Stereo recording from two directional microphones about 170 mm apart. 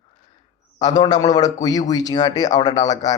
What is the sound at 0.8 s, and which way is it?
A man's voice, 25° left (ahead or behind).